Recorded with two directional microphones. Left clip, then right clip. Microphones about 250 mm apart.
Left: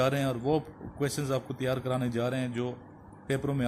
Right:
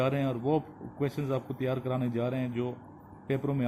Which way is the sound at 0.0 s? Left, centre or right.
Centre.